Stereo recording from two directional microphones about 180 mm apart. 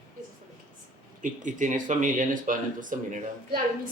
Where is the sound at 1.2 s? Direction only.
45° right (ahead or behind).